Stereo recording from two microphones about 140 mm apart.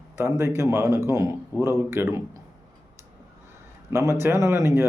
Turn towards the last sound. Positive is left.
turn(degrees=-20)  # may be behind; listen again after turning